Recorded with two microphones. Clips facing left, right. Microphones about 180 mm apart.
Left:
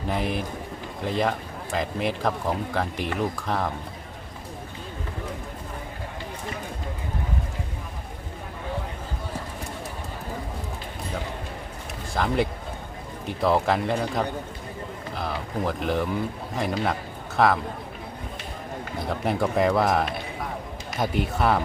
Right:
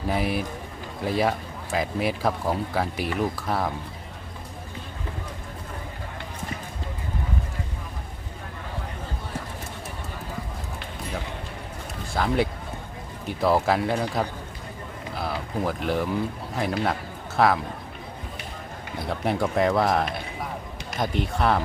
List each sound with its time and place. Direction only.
0.1 s speech: 5° right (ahead or behind)
12.1 s a man's voice: centre (ahead or behind)
19.2 s speech: centre (ahead or behind)